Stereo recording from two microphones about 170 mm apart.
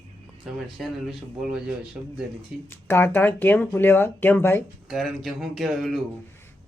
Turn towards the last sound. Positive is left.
turn(degrees=0)  # may be behind; listen again after turning